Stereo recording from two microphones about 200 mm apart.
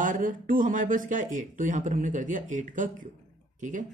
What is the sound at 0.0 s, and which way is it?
Speech, 40° right (ahead or behind).